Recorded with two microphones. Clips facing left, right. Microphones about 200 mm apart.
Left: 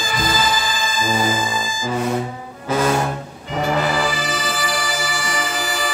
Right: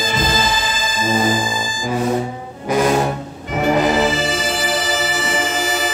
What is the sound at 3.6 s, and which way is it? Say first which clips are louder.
Music: right 5 dB; 20° right (ahead or behind).